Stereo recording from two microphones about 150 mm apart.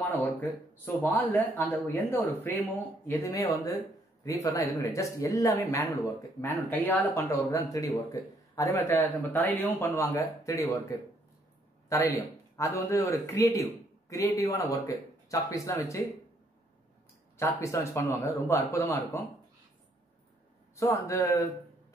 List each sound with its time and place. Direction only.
0.1 s speech: 10° left (ahead or behind)
11.9 s speech: 20° left (ahead or behind)
17.4 s speech: 20° left (ahead or behind)
20.7 s speech: 20° left (ahead or behind)